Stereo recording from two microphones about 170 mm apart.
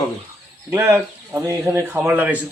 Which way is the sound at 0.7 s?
15° right (ahead or behind).